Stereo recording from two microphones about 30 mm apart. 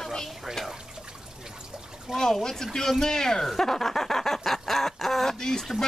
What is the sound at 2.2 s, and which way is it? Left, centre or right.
Speech, centre.